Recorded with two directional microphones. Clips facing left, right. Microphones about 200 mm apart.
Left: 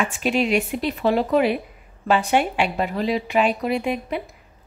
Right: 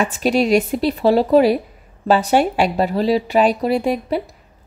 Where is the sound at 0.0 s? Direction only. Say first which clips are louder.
Right 5 dB; 40° right (ahead or behind).